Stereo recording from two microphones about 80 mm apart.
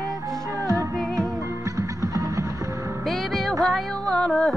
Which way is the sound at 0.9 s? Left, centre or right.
Centre.